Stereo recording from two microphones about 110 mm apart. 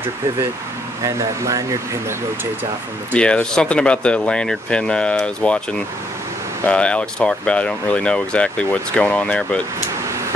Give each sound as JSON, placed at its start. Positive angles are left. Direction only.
{"t": 1.0, "sound": "speech", "side_deg": -30}
{"t": 3.1, "sound": "speech", "side_deg": 10}